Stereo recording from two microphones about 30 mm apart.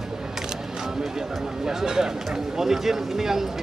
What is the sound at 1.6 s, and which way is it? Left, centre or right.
Speech, centre.